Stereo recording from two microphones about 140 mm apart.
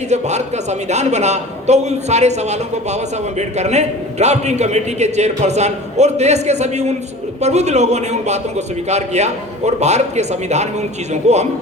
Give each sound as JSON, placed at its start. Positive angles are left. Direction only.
{"t": 0.1, "sound": "a man's voice", "side_deg": -55}